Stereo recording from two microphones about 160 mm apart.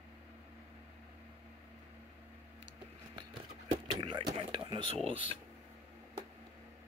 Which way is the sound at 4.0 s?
30° right (ahead or behind).